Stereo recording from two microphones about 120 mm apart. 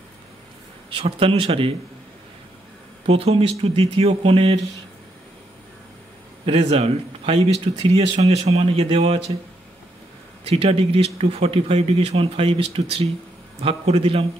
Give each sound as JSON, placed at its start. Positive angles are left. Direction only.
{"t": 0.8, "sound": "speech", "side_deg": -50}
{"t": 3.1, "sound": "speech", "side_deg": -50}
{"t": 6.4, "sound": "speech", "side_deg": -50}
{"t": 10.4, "sound": "speech", "side_deg": -55}